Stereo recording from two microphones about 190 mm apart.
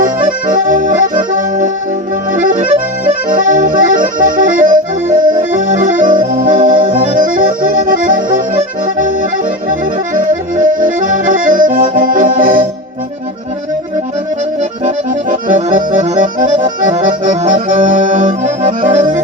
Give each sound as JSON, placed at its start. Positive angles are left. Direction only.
{"t": 0.0, "sound": "accordion", "side_deg": -45}
{"t": 10.2, "sound": "accordion", "side_deg": -45}
{"t": 14.8, "sound": "accordion", "side_deg": -45}